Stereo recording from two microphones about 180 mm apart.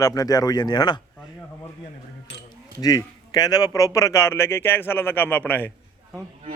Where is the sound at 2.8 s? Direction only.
20° left (ahead or behind).